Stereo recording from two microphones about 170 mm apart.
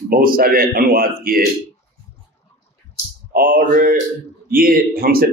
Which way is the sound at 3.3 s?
55° right (ahead or behind).